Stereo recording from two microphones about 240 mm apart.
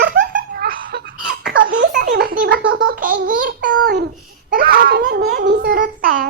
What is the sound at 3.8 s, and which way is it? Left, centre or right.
Babbling, right.